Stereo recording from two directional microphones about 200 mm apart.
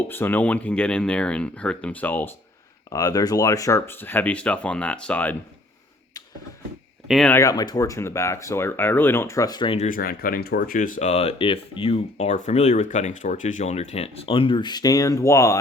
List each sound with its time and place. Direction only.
0.0 s speech: 10° left (ahead or behind)
7.1 s speech: centre (ahead or behind)
7.3 s speech: 15° left (ahead or behind)